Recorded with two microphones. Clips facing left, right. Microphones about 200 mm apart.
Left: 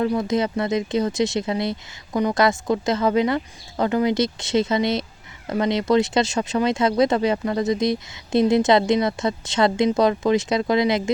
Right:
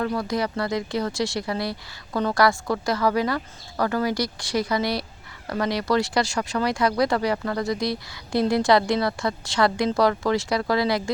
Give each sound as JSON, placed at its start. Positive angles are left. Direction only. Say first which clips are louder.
{"t": 0.0, "sound": "speech", "louder": "left 4 dB", "side_deg": 20}